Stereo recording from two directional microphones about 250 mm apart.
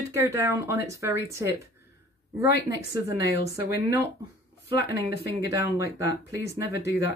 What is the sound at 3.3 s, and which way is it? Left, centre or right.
Speech, left.